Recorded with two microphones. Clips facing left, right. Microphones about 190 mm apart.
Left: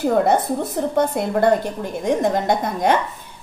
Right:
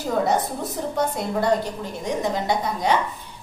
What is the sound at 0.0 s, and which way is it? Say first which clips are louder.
A woman's voice: left 5 dB; 55° left (ahead or behind).